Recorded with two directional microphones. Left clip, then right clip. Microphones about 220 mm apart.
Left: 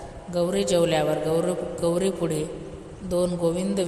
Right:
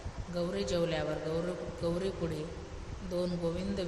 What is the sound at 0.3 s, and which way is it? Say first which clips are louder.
A woman's voice: left 11 dB; 35° left (ahead or behind).